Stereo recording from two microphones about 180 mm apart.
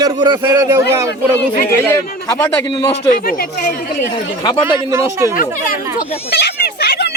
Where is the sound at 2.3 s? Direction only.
20° left (ahead or behind).